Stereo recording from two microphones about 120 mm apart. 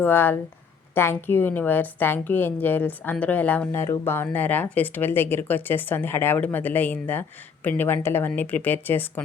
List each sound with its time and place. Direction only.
0.0 s speech: 15° left (ahead or behind)